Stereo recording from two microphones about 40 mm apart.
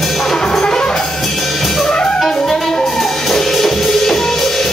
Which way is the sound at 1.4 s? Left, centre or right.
Centre.